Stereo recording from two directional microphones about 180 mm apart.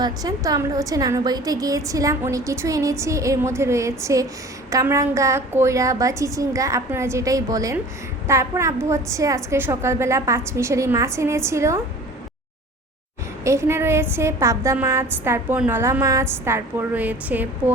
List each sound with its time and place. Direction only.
0.0 s a woman's voice: 20° right (ahead or behind)
13.4 s a woman's voice: 15° right (ahead or behind)